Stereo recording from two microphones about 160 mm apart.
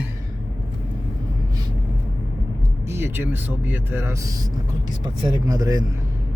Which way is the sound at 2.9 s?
15° right (ahead or behind).